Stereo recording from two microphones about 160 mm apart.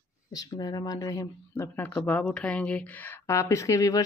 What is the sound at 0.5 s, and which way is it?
Speech, 25° left (ahead or behind).